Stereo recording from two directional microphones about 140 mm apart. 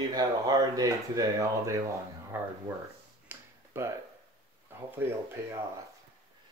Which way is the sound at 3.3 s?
20° right (ahead or behind).